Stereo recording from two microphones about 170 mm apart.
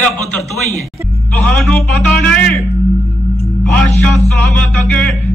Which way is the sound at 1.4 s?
5° left (ahead or behind).